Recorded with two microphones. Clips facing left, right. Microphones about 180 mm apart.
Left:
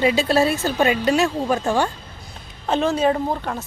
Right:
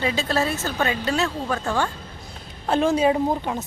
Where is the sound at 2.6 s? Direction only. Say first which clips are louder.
Even; 10° right (ahead or behind).